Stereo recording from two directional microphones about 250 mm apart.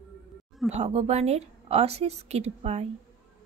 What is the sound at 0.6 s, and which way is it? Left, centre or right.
Speech, right.